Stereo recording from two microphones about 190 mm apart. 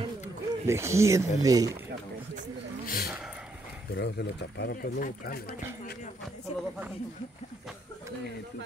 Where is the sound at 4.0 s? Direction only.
65° left (ahead or behind).